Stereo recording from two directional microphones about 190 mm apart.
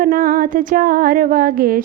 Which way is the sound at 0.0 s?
50° right (ahead or behind).